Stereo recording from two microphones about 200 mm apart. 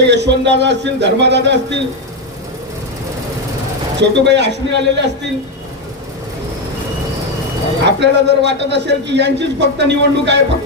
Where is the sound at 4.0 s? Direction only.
60° right (ahead or behind).